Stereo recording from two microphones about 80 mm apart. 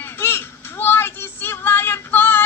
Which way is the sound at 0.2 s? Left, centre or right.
Left.